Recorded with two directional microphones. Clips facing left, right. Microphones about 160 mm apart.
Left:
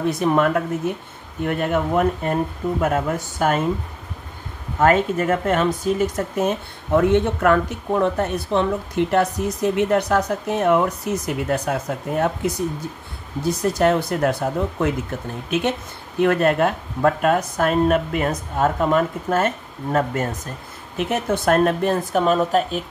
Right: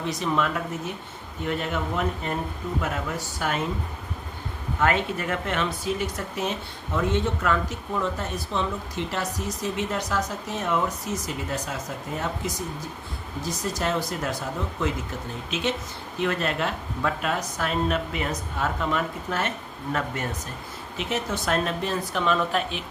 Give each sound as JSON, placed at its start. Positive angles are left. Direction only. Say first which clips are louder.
{"t": 0.0, "sound": "speech", "louder": "left 7 dB", "side_deg": 55}
{"t": 4.7, "sound": "speech", "louder": "left 7 dB", "side_deg": 40}
{"t": 15.5, "sound": "speech", "louder": "left 6 dB", "side_deg": 55}